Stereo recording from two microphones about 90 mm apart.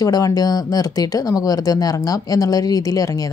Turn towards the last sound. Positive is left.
turn(degrees=40)  # may be behind; listen again after turning